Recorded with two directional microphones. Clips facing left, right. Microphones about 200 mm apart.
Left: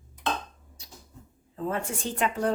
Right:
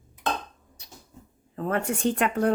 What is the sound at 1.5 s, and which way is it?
Speech, 65° right (ahead or behind).